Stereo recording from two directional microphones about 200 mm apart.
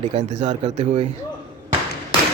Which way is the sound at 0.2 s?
35° right (ahead or behind).